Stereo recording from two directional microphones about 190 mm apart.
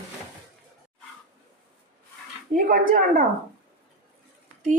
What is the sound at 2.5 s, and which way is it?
Speech, 45° right (ahead or behind).